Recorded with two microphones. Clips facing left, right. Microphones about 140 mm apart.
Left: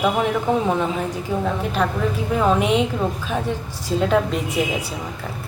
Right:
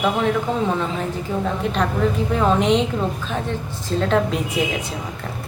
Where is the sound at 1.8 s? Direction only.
5° left (ahead or behind).